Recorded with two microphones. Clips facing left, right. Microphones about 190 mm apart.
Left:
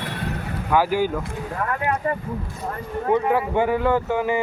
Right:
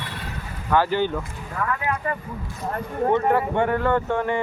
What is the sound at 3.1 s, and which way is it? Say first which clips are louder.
Speech: left 2 dB; 5° left (ahead or behind).